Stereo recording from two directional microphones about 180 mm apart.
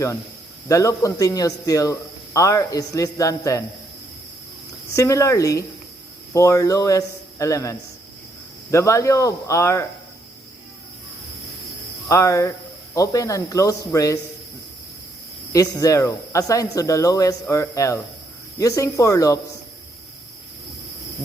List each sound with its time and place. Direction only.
0.7 s speech: 15° left (ahead or behind)
4.9 s speech: 15° left (ahead or behind)
12.0 s speech: 15° left (ahead or behind)
15.5 s speech: 20° left (ahead or behind)